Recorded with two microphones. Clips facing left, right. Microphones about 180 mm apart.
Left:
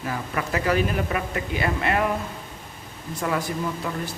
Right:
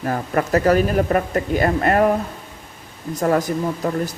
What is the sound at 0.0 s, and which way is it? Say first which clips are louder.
Speech: right 7 dB; 50° right (ahead or behind).